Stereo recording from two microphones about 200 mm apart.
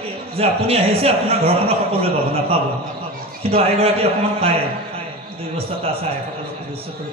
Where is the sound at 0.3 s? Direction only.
30° right (ahead or behind).